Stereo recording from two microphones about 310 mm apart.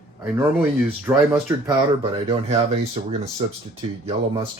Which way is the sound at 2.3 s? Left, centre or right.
Centre.